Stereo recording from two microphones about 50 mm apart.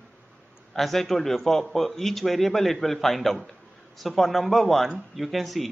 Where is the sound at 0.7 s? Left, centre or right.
Centre.